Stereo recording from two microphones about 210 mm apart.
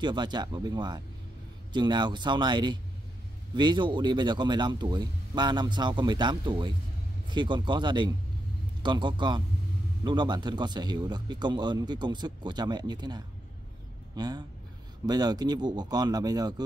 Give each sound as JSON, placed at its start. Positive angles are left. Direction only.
{"t": 0.0, "sound": "speech", "side_deg": -20}